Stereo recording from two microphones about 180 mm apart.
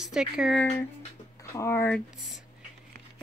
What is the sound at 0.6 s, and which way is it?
Speech, 10° left (ahead or behind).